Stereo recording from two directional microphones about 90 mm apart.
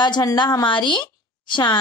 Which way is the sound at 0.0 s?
45° left (ahead or behind).